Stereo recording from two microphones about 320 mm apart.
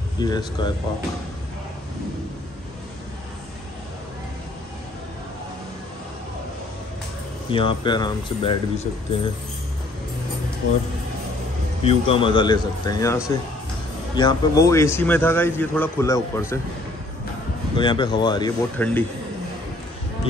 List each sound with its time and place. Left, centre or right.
0.2 s a man's voice: centre
7.5 s a man's voice: centre
11.8 s a man's voice: centre
17.7 s a man's voice: centre